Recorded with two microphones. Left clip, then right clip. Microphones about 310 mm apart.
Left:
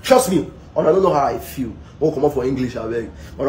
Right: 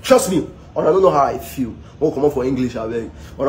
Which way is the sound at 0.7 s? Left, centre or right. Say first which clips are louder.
Right 1 dB; centre.